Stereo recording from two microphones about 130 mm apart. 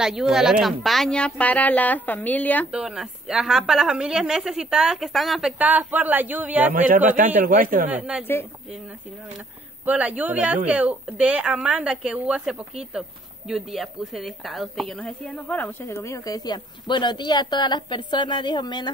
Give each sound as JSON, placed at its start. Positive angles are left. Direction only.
{"t": 0.0, "sound": "speech", "side_deg": -5}
{"t": 2.7, "sound": "a woman's voice", "side_deg": -5}
{"t": 5.6, "sound": "speech", "side_deg": -10}
{"t": 6.7, "sound": "speech", "side_deg": -90}
{"t": 7.9, "sound": "speech", "side_deg": -5}
{"t": 9.8, "sound": "a woman's voice", "side_deg": -10}